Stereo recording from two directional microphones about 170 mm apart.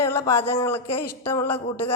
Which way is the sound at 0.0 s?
15° left (ahead or behind).